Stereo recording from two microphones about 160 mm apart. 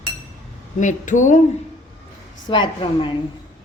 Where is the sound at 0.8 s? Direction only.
50° left (ahead or behind).